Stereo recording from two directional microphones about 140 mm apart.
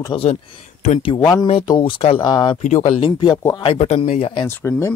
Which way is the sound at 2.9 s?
35° left (ahead or behind).